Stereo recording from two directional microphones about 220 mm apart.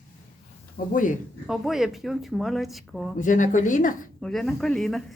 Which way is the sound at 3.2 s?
35° left (ahead or behind).